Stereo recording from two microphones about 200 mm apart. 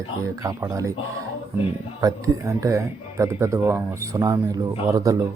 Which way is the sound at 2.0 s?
15° right (ahead or behind).